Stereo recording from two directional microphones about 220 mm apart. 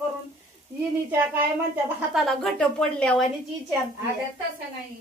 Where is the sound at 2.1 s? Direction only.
Centre (ahead or behind).